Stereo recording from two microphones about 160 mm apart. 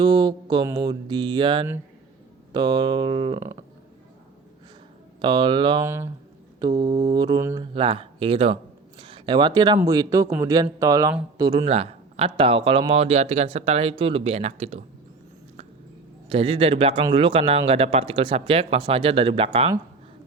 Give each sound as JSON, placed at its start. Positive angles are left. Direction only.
{"t": 0.0, "sound": "speech", "side_deg": -25}
{"t": 5.2, "sound": "speech", "side_deg": -30}
{"t": 5.8, "sound": "speech", "side_deg": -15}
{"t": 7.7, "sound": "speech", "side_deg": -35}
{"t": 11.7, "sound": "speech", "side_deg": -40}
{"t": 16.3, "sound": "speech", "side_deg": -35}